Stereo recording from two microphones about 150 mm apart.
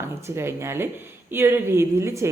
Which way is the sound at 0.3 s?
15° right (ahead or behind).